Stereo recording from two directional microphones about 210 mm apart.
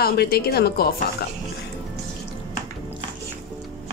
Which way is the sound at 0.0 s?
50° left (ahead or behind).